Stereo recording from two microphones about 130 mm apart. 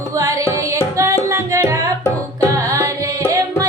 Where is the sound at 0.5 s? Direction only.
25° right (ahead or behind).